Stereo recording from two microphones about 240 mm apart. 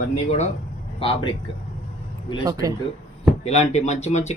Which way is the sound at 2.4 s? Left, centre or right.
Centre.